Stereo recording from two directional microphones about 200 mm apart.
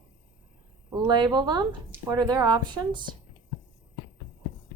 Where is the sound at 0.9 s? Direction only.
20° right (ahead or behind).